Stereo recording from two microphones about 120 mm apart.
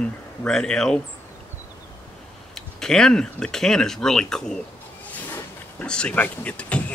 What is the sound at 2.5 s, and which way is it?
Speech, 5° left (ahead or behind).